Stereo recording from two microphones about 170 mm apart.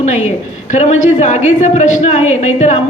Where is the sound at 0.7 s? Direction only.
45° left (ahead or behind).